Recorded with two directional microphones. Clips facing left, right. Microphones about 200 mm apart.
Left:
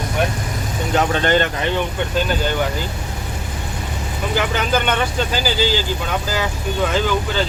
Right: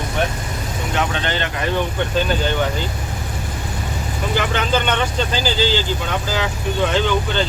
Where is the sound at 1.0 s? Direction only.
45° left (ahead or behind).